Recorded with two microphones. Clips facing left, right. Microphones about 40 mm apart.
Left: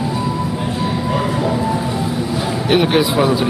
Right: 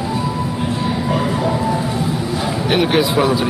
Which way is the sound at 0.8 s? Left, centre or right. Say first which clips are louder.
Even; centre.